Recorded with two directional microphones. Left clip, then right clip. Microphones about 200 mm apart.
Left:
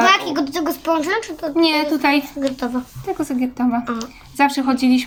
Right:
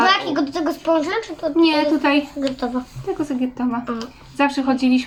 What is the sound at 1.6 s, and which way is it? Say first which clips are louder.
Speech: even; 50° left (ahead or behind).